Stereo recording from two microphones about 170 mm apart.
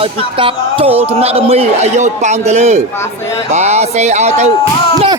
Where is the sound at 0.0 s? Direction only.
30° right (ahead or behind).